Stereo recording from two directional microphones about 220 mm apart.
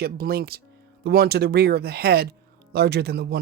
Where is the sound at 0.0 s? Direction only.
45° right (ahead or behind).